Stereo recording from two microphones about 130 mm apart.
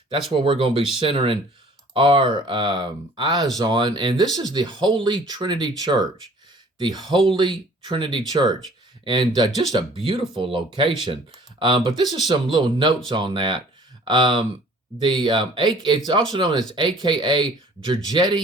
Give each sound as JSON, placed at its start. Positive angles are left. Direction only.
{"t": 0.1, "sound": "speech", "side_deg": -40}